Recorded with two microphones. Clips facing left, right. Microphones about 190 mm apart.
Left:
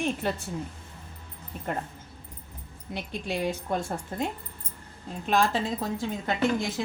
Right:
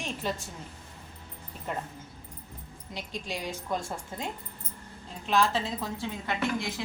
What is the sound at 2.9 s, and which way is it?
Speech, 60° left (ahead or behind).